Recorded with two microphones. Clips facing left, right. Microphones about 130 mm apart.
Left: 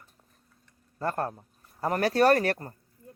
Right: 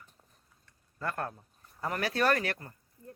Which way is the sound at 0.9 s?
35° left (ahead or behind).